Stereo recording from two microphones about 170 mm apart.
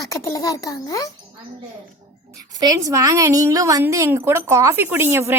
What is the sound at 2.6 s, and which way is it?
A woman's voice, 20° right (ahead or behind).